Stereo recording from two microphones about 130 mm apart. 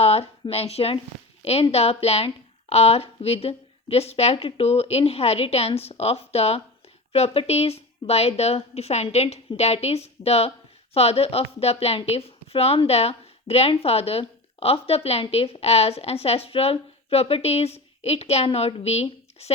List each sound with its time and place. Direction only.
0.0 s a woman's voice: 50° left (ahead or behind)